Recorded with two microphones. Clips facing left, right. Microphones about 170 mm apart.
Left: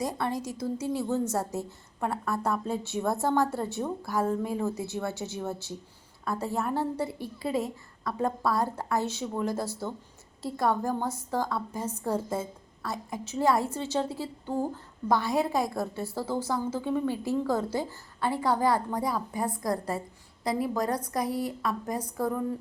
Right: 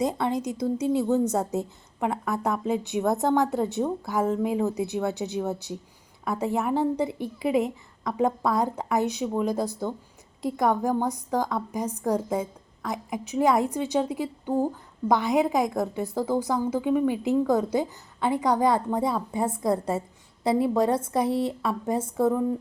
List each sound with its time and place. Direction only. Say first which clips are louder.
0.0 s a woman's voice: right 5 dB; 20° right (ahead or behind)